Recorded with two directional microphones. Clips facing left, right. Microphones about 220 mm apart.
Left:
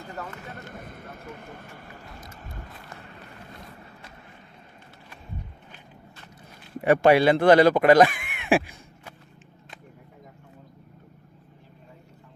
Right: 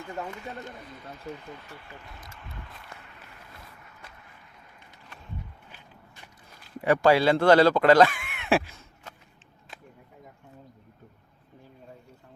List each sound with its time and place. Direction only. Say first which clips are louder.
0.5 s speech: even; 50° left (ahead or behind)
3.0 s a sound: left 6 dB; 35° left (ahead or behind)
6.8 s speech: left 3 dB; 20° left (ahead or behind)